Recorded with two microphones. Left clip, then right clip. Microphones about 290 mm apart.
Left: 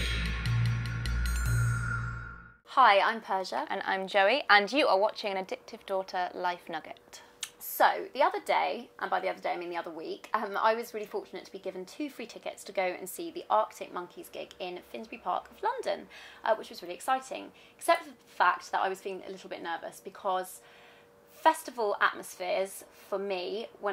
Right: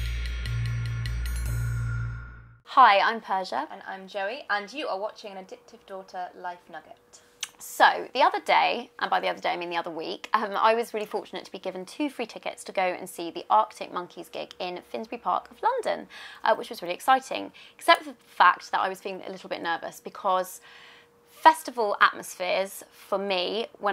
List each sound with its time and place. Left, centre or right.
0.2 s music: centre
2.7 s a woman's voice: right
3.7 s a woman's voice: left
7.3 s speech: right